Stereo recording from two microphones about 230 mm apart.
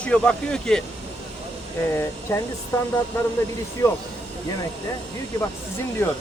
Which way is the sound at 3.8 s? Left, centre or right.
Centre.